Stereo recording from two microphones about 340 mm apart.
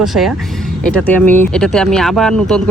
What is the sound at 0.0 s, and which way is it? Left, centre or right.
Speech, centre.